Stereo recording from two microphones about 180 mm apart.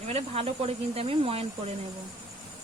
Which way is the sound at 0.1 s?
35° right (ahead or behind).